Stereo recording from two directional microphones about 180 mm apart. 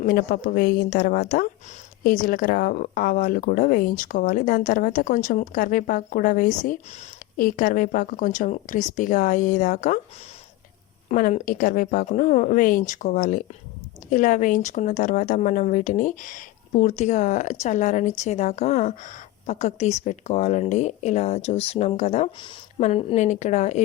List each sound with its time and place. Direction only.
0.0 s speech: 55° left (ahead or behind)
11.1 s speech: 45° left (ahead or behind)